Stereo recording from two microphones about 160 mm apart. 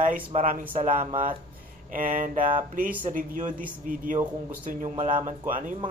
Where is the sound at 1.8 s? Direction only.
60° right (ahead or behind).